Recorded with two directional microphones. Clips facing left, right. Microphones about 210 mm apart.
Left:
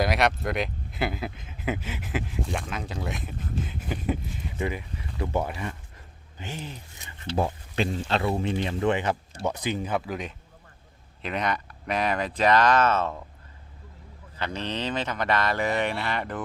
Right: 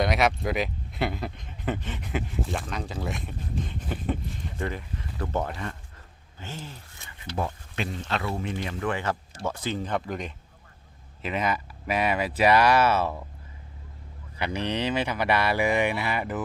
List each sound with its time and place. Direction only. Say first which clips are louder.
0.0 s speech: even; centre (ahead or behind); by 7.1 s 15° left (ahead or behind)
7.3 s speech: left 4 dB; 30° left (ahead or behind); by 13.2 s 10° right (ahead or behind)
14.3 s speech: right 3 dB; 10° right (ahead or behind)